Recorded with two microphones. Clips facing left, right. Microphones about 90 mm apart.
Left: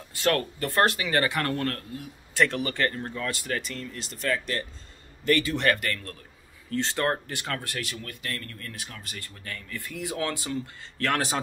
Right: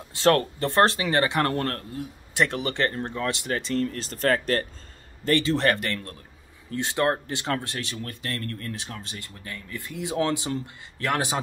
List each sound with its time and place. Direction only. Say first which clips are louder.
0.1 s speech: right 5 dB; 30° right (ahead or behind)
2.3 s speech: even; 20° right (ahead or behind)
3.8 s speech: right 7 dB; 40° right (ahead or behind)
5.2 s a man's voice: right 2 dB; 30° right (ahead or behind)